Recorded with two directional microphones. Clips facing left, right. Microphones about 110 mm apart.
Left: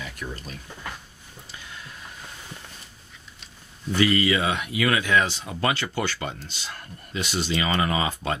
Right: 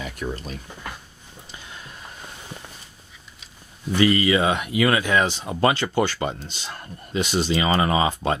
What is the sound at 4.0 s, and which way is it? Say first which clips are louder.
Speech: right 3 dB; 30° right (ahead or behind).